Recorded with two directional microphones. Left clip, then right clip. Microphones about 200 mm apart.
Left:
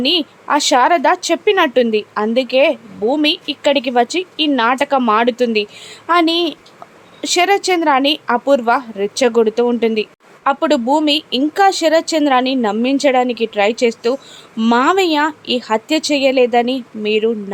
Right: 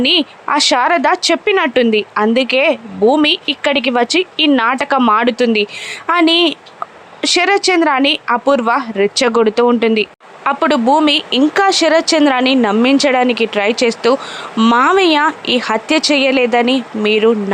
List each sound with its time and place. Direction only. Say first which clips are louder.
0.0 s speech: right 3 dB; 10° right (ahead or behind)